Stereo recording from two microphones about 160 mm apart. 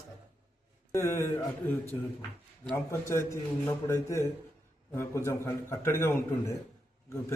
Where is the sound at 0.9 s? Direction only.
15° left (ahead or behind).